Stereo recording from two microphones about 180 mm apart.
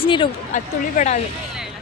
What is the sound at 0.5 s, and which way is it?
Speech, 45° left (ahead or behind).